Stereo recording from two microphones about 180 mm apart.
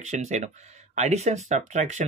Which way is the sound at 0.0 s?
40° right (ahead or behind).